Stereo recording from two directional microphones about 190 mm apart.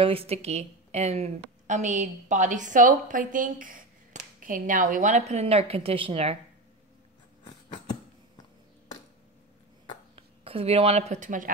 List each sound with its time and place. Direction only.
0.0 s a woman's voice: 30° right (ahead or behind)
7.4 s a sound: 25° left (ahead or behind)
10.1 s speech: 30° right (ahead or behind)